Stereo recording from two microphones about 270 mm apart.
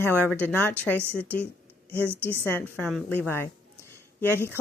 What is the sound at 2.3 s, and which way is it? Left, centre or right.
A woman's voice, centre.